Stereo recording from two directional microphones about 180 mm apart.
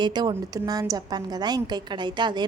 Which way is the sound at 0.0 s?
25° right (ahead or behind).